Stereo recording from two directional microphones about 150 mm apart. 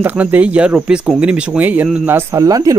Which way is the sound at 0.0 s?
10° right (ahead or behind).